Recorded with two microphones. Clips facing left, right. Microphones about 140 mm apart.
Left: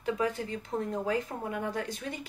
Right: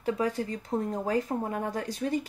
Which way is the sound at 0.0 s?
35° right (ahead or behind).